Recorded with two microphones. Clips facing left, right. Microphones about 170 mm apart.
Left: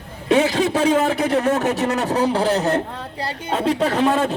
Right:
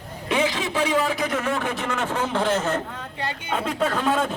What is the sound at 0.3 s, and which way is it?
A man's voice, 40° left (ahead or behind).